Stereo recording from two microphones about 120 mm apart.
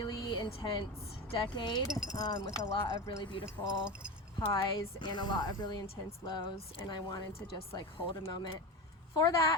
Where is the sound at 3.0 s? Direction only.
45° left (ahead or behind).